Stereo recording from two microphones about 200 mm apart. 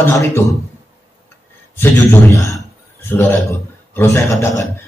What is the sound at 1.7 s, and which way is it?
A man's voice, 10° left (ahead or behind).